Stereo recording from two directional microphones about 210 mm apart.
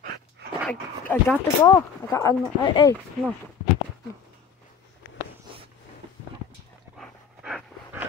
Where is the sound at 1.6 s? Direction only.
15° left (ahead or behind).